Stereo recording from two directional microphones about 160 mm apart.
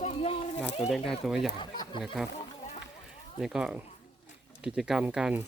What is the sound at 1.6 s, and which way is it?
Speech, 30° left (ahead or behind).